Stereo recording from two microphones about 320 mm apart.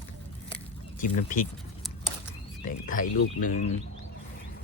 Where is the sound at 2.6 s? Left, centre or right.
Left.